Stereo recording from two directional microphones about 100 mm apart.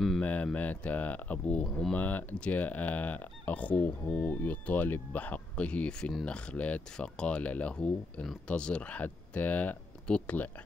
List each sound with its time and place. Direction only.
0.2 s speech: 15° left (ahead or behind)